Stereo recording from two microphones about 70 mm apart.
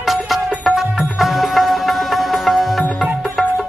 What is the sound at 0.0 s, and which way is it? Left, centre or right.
Music, centre.